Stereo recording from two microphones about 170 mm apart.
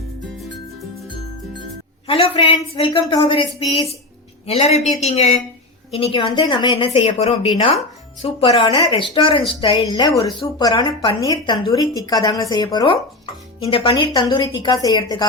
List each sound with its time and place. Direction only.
2.0 s a woman's voice: 35° left (ahead or behind)
4.4 s a woman's voice: 40° left (ahead or behind); by 15.3 s 25° left (ahead or behind)